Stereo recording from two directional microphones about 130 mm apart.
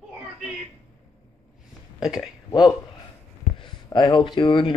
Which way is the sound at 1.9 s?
5° right (ahead or behind).